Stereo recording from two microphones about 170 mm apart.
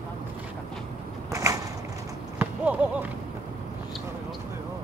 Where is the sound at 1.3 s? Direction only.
20° right (ahead or behind).